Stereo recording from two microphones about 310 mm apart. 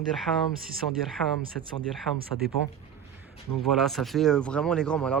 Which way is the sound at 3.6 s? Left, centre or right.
Centre.